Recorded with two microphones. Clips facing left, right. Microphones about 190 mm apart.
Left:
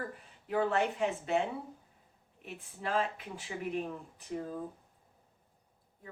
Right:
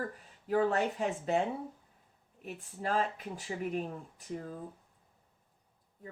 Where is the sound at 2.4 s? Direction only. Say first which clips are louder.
Right 2 dB; 40° right (ahead or behind).